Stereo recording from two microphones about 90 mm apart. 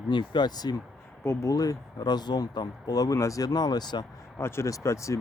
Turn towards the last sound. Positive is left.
turn(degrees=35)  # may be behind; listen again after turning